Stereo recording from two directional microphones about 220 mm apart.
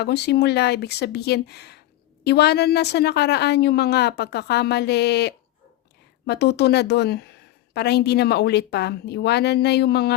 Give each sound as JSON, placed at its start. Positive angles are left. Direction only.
{"t": 0.0, "sound": "a woman's voice", "side_deg": 50}